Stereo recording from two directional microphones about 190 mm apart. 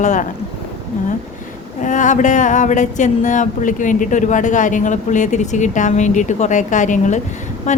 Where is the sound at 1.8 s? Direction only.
40° left (ahead or behind).